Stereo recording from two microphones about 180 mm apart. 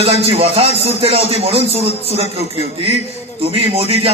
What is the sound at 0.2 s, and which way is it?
A man's voice, 30° right (ahead or behind).